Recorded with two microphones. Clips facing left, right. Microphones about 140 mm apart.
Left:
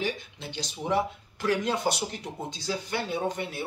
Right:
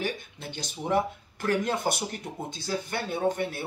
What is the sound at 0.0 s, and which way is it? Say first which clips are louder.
Speech: left 1 dB; 50° right (ahead or behind).